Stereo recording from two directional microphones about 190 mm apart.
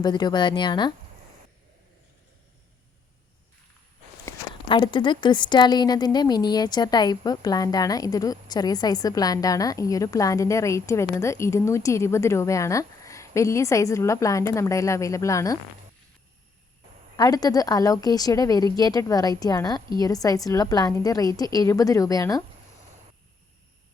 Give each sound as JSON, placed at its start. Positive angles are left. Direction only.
{"t": 0.0, "sound": "a woman's voice", "side_deg": 20}
{"t": 4.7, "sound": "a woman's voice", "side_deg": 25}
{"t": 17.2, "sound": "a woman's voice", "side_deg": 20}